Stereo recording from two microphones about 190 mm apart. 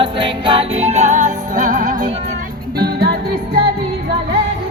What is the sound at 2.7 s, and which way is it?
Music, 55° right (ahead or behind).